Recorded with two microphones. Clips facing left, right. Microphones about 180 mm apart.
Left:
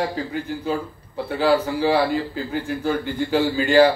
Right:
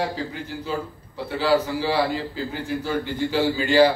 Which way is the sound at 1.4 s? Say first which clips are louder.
Left 2 dB; 50° left (ahead or behind).